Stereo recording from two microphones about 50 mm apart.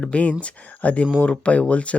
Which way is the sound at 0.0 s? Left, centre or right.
Left.